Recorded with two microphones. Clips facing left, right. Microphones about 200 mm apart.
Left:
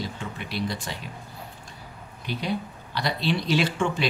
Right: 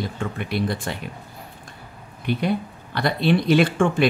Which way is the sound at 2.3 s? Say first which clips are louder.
Right 6 dB; 55° right (ahead or behind).